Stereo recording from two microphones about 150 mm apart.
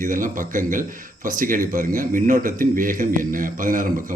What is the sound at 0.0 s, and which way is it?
A man's voice, 60° right (ahead or behind).